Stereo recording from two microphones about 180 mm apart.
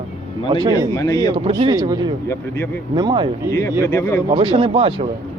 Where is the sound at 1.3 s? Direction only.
25° right (ahead or behind).